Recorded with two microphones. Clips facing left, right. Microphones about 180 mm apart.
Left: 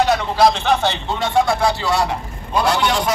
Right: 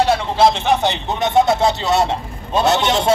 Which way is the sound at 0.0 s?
30° right (ahead or behind).